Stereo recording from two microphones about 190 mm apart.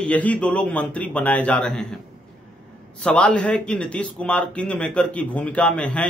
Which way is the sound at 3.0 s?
5° left (ahead or behind).